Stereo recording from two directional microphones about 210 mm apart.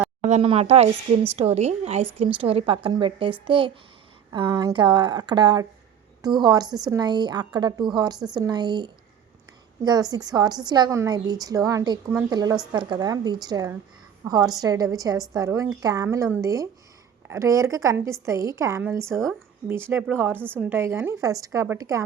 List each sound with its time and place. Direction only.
0.2 s a woman's voice: 35° right (ahead or behind); by 22.0 s 15° right (ahead or behind)